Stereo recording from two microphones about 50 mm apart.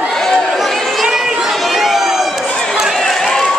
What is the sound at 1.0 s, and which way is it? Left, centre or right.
Crowd, centre.